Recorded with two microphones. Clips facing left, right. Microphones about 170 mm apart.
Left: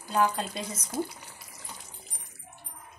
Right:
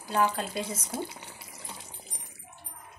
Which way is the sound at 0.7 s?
30° right (ahead or behind).